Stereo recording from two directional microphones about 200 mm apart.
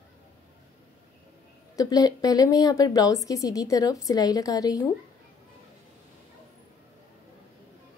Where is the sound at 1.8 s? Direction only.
20° left (ahead or behind).